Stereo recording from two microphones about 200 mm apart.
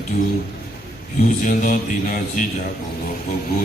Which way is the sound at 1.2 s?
40° left (ahead or behind).